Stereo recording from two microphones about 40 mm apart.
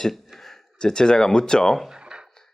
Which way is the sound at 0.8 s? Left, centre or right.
Centre.